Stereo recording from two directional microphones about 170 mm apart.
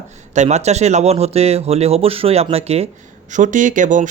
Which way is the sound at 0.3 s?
40° right (ahead or behind).